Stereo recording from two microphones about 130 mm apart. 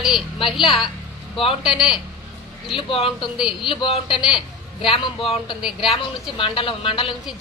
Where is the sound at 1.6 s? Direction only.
5° right (ahead or behind).